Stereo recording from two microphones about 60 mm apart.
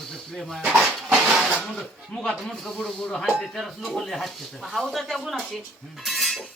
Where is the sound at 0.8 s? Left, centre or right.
Centre.